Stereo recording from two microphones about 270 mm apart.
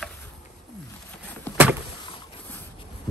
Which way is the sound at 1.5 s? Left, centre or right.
Centre.